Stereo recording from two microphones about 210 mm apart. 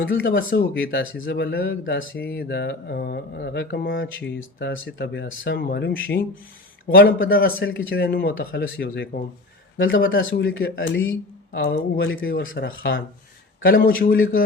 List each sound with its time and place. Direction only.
0.1 s speech: 45° left (ahead or behind)
0.5 s speech: 55° left (ahead or behind)
1.8 s speech: 65° left (ahead or behind)
2.3 s speech: 50° left (ahead or behind)
8.4 s speech: 65° left (ahead or behind)
8.8 s speech: 45° left (ahead or behind)
9.7 s speech: 65° left (ahead or behind)
13.6 s speech: 45° left (ahead or behind)